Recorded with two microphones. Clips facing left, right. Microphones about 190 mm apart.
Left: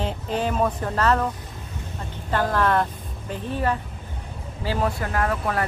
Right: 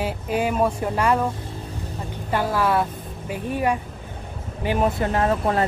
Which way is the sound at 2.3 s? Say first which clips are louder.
Even; 10° right (ahead or behind).